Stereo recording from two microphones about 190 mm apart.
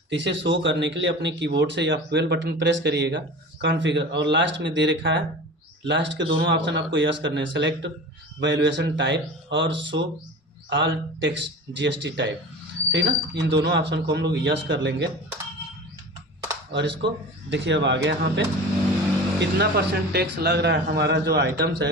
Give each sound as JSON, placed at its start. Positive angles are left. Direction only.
{"t": 0.1, "sound": "a man's voice", "side_deg": -70}
{"t": 16.7, "sound": "a man's voice", "side_deg": -70}